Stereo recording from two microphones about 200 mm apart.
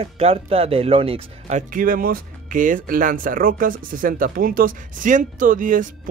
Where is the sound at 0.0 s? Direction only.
30° right (ahead or behind).